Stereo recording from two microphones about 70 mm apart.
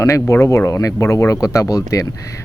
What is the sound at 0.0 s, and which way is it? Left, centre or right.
Speech, left.